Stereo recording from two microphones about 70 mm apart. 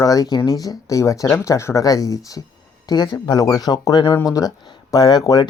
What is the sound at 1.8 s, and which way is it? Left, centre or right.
Speech, left.